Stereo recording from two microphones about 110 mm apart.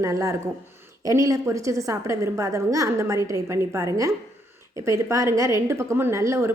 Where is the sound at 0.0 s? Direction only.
30° right (ahead or behind).